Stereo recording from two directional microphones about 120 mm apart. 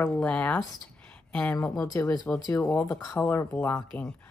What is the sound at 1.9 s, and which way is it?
Speech, 20° left (ahead or behind).